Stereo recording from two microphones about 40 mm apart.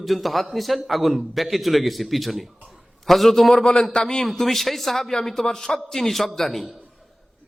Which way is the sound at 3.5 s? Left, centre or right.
Left.